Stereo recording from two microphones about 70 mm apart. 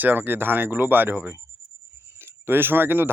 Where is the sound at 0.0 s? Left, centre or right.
Right.